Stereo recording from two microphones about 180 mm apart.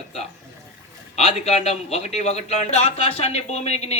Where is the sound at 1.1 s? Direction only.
35° left (ahead or behind).